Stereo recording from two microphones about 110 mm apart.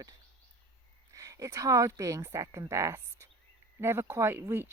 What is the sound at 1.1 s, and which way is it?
Speech, 30° right (ahead or behind).